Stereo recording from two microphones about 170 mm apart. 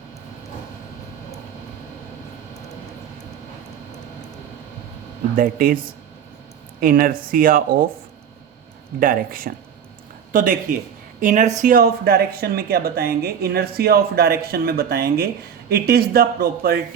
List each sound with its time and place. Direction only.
5.4 s a woman's voice: 55° right (ahead or behind)
9.0 s a woman's voice: 55° right (ahead or behind)